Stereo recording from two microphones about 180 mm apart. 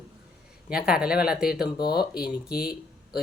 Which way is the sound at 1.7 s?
25° left (ahead or behind).